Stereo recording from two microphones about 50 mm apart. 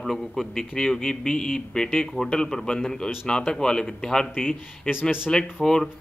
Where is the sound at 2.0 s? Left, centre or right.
Centre.